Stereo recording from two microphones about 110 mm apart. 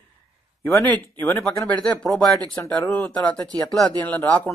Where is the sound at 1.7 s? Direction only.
10° left (ahead or behind).